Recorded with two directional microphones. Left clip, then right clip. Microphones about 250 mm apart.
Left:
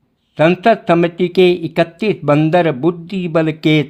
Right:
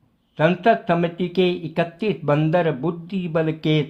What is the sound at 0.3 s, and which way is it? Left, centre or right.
Speech, left.